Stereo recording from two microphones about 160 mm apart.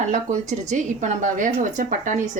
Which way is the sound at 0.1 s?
50° right (ahead or behind).